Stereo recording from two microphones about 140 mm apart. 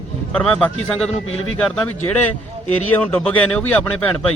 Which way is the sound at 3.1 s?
10° left (ahead or behind).